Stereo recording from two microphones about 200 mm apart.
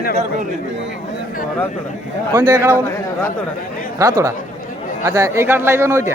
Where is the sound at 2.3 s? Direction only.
20° right (ahead or behind).